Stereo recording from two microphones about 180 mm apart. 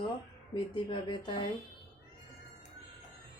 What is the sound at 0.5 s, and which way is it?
Music, 25° left (ahead or behind).